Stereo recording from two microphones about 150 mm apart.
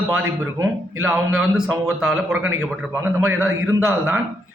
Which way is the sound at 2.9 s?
15° right (ahead or behind).